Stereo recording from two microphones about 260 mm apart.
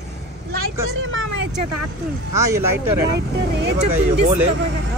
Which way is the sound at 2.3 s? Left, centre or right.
Centre.